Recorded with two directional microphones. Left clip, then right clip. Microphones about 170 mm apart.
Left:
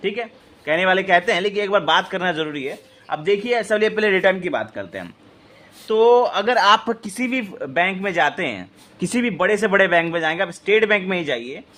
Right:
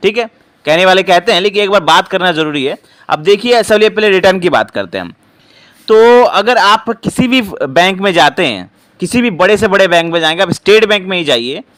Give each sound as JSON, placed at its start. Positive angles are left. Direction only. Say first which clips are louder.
{"t": 0.0, "sound": "a man's voice", "louder": "right 12 dB", "side_deg": -45}
{"t": 2.6, "sound": "a man's voice", "louder": "right 12 dB", "side_deg": -55}
{"t": 4.2, "sound": "a man's voice", "louder": "right 10 dB", "side_deg": -50}
{"t": 7.3, "sound": "a man's voice", "louder": "right 12 dB", "side_deg": -50}
{"t": 9.0, "sound": "a man's voice", "louder": "right 10 dB", "side_deg": -30}
{"t": 10.6, "sound": "speech", "louder": "right 10 dB", "side_deg": -55}
{"t": 10.8, "sound": "a man's voice", "louder": "right 7 dB", "side_deg": -30}
{"t": 11.3, "sound": "speech", "louder": "right 13 dB", "side_deg": -55}